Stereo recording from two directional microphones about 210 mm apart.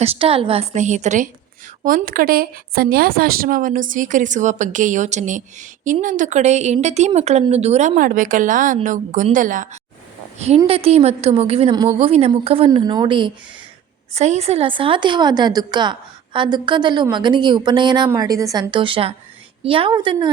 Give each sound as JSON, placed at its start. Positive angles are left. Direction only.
{"t": 0.0, "sound": "a woman's voice", "side_deg": -25}